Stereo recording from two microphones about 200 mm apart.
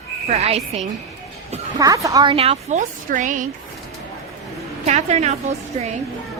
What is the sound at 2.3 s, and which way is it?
A woman's voice, 30° right (ahead or behind).